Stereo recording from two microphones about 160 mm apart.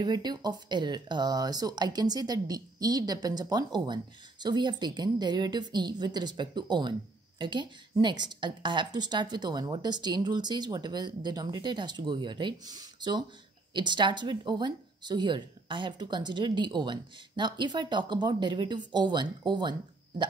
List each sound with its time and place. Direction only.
0.0 s speech: 25° right (ahead or behind)